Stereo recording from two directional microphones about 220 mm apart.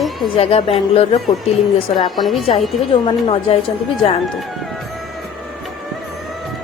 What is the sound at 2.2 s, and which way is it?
Speech, centre (ahead or behind).